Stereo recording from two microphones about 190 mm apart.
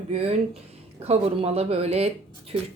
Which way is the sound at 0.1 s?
30° right (ahead or behind).